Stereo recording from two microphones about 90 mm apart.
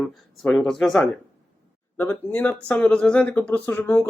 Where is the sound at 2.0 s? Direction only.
20° left (ahead or behind).